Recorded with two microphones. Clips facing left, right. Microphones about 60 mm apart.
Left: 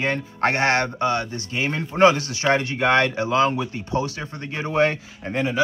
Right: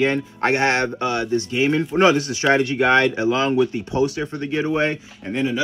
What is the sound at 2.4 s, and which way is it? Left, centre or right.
Speech, centre.